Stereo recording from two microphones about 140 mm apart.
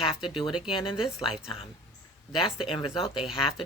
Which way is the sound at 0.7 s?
35° left (ahead or behind).